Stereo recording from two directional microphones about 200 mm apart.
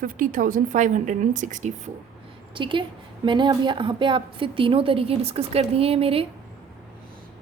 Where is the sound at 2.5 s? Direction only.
25° right (ahead or behind).